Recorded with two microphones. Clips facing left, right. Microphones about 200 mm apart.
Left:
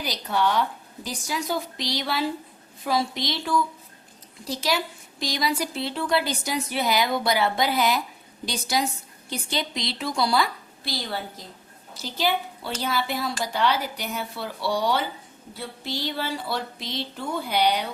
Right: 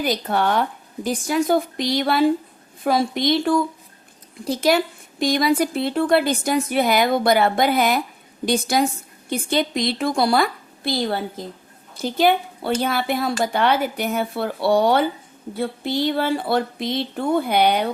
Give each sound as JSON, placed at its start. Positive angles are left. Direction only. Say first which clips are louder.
{"t": 0.0, "sound": "a woman's voice", "louder": "right 4 dB", "side_deg": -55}